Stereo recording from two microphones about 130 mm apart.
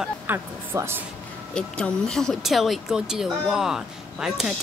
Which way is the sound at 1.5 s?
5° left (ahead or behind).